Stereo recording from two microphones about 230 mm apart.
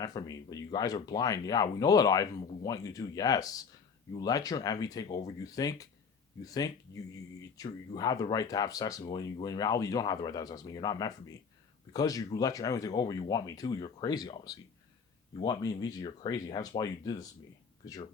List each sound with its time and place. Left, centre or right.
0.0 s speech: centre